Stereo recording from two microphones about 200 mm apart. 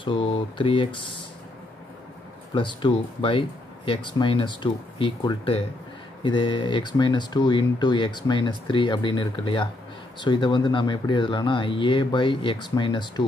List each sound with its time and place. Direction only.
0.0 s speech: 25° left (ahead or behind)
2.5 s speech: 25° left (ahead or behind)